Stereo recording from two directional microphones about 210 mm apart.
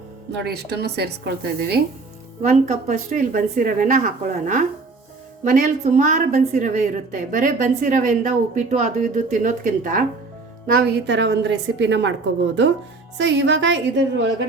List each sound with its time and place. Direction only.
0.4 s a woman's voice: 50° right (ahead or behind)
2.4 s a woman's voice: 35° right (ahead or behind); by 12.1 s 55° right (ahead or behind)
13.1 s a woman's voice: 60° right (ahead or behind)